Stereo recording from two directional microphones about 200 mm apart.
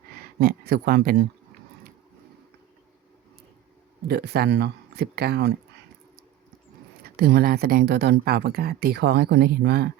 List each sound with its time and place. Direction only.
0.3 s speech: 50° right (ahead or behind)
4.0 s speech: 55° right (ahead or behind)
7.0 s speech: 50° right (ahead or behind)